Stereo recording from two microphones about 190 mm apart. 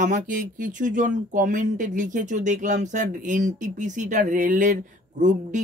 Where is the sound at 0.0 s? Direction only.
45° right (ahead or behind).